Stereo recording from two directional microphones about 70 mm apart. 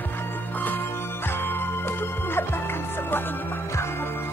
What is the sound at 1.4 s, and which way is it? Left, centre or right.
Music, left.